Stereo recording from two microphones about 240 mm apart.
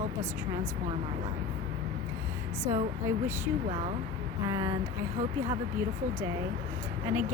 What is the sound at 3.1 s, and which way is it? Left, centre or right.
Speech, centre.